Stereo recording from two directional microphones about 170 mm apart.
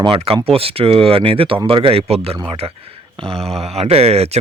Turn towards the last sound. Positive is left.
turn(degrees=-40)  # may be behind; listen again after turning